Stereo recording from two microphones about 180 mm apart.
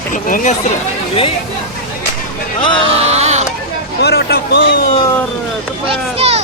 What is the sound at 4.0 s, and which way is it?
Speech, 65° left (ahead or behind).